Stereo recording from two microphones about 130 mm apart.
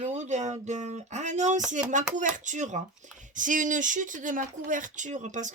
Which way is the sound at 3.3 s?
85° right.